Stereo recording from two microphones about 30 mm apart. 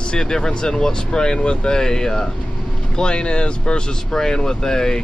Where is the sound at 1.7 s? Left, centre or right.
Centre.